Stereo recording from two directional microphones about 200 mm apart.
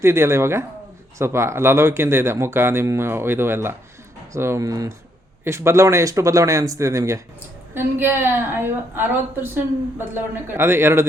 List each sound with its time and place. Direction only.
0.0 s speech: 15° right (ahead or behind)